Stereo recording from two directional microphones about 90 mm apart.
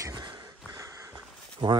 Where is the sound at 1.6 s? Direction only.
65° right (ahead or behind).